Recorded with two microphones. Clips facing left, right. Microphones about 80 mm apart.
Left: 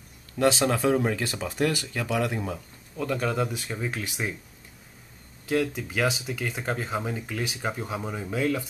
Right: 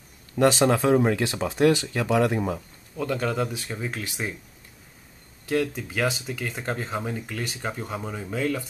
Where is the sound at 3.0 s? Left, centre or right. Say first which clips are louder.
Right 1 dB; centre.